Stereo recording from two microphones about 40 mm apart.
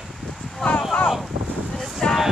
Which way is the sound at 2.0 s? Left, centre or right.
Centre.